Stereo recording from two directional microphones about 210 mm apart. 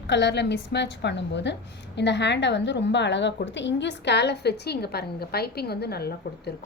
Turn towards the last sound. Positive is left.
turn(degrees=50)  # may be behind; listen again after turning